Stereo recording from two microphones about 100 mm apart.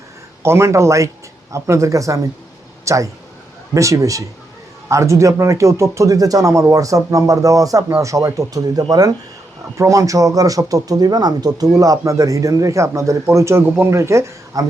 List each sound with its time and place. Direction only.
0.4 s speech: 25° right (ahead or behind)